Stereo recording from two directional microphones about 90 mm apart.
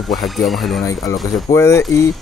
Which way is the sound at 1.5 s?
30° left (ahead or behind).